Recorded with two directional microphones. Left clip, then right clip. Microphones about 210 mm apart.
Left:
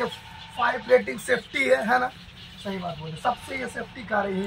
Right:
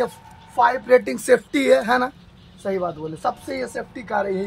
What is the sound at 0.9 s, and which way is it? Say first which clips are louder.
Speech: right 5 dB; 30° right (ahead or behind).